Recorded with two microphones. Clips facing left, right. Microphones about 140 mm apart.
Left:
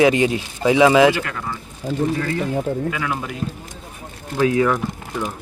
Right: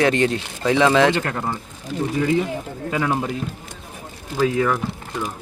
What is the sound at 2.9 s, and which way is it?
Speech, 35° right (ahead or behind).